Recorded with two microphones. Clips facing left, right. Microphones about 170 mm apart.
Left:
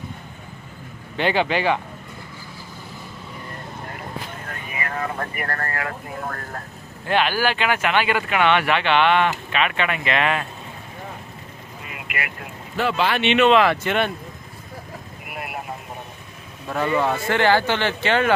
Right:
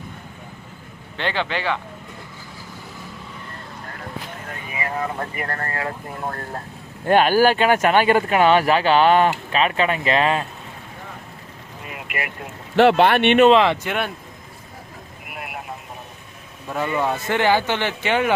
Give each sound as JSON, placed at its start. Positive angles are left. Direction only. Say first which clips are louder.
{"t": 1.1, "sound": "speech", "louder": "left 4 dB", "side_deg": 10}
{"t": 4.7, "sound": "speech", "louder": "right 2 dB", "side_deg": -20}
{"t": 7.1, "sound": "speech", "louder": "right 6 dB", "side_deg": -45}
{"t": 12.7, "sound": "speech", "louder": "right 8 dB", "side_deg": -75}
{"t": 13.5, "sound": "speech", "louder": "right 1 dB", "side_deg": -25}
{"t": 13.8, "sound": "speech", "louder": "left 3 dB", "side_deg": -5}
{"t": 15.4, "sound": "vehicle", "louder": "left 2 dB", "side_deg": 0}
{"t": 16.6, "sound": "speech", "louder": "left 1 dB", "side_deg": -10}